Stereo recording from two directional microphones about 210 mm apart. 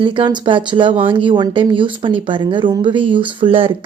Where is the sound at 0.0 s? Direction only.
25° right (ahead or behind).